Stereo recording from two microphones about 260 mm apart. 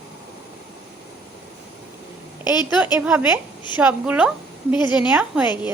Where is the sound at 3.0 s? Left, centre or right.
Centre.